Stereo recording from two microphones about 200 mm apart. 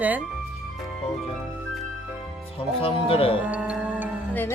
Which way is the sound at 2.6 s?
30° left (ahead or behind).